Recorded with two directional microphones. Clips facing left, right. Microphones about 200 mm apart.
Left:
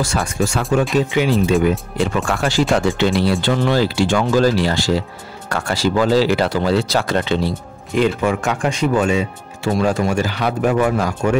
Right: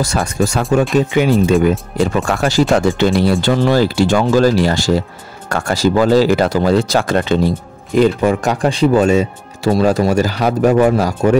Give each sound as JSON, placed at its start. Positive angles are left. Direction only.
{"t": 0.0, "sound": "speech", "side_deg": -40}